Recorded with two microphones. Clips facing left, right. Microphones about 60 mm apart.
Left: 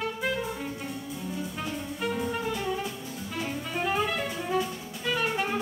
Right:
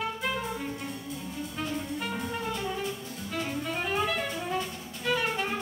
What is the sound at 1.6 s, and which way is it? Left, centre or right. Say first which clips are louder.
Music: right 3 dB; centre.